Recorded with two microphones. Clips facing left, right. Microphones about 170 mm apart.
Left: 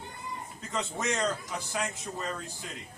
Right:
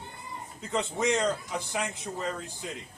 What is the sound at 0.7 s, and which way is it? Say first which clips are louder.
A man's voice: right 5 dB; 15° right (ahead or behind).